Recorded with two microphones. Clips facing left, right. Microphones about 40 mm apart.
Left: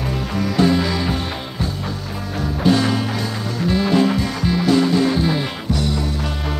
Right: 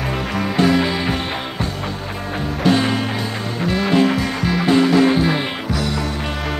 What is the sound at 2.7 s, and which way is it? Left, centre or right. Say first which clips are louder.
Music: even; right.